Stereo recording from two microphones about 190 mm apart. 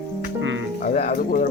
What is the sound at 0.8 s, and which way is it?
Music, 45° left (ahead or behind).